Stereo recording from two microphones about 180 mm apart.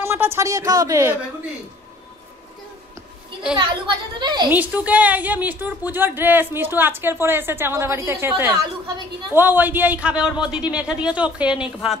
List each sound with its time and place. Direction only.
0.0 s a woman's voice: 15° right (ahead or behind)
4.2 s a woman's voice: 25° right (ahead or behind)
4.5 s a woman's voice: 10° right (ahead or behind)